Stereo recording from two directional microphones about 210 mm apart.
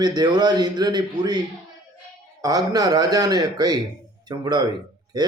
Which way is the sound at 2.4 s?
15° right (ahead or behind).